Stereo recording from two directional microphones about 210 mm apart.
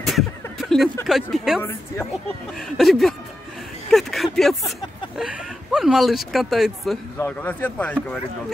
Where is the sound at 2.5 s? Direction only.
Centre (ahead or behind).